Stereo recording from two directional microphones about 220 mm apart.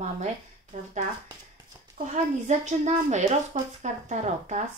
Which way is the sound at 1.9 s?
35° right (ahead or behind).